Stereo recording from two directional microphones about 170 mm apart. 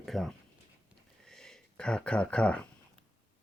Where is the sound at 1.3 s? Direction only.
5° left (ahead or behind).